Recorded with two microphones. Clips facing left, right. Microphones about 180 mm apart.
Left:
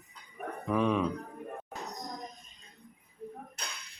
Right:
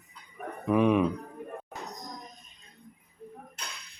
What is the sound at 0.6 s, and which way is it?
Speech, 10° right (ahead or behind).